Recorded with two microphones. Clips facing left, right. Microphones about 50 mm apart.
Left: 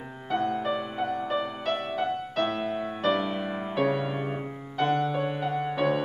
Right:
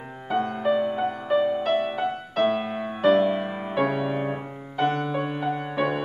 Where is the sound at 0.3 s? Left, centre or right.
Centre.